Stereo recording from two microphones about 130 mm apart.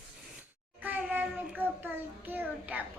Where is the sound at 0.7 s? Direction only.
10° right (ahead or behind).